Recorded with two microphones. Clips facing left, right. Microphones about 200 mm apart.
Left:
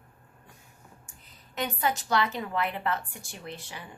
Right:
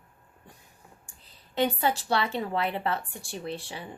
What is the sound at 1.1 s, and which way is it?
Speech, 30° right (ahead or behind).